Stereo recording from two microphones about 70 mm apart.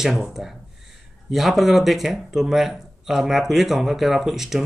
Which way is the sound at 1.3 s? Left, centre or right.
Centre.